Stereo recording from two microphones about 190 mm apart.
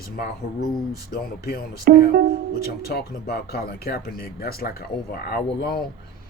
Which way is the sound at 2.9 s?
55° left (ahead or behind).